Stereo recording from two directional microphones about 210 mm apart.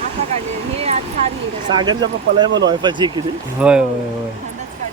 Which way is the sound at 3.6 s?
5° right (ahead or behind).